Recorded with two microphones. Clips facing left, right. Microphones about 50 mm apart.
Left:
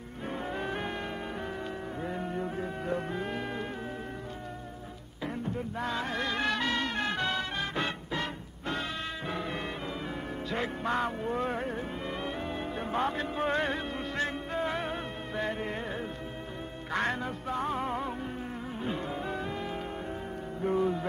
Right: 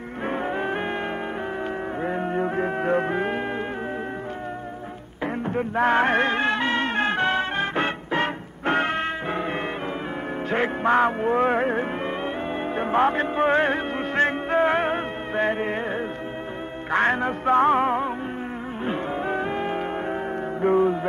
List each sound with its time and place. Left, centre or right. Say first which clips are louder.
0.3 s music: right 8 dB; right
2.0 s music: right 10 dB; right
5.2 s music: right 9 dB; right
18.9 s music: right 9 dB; right